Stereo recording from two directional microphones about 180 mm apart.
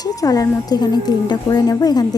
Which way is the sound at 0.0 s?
20° left (ahead or behind).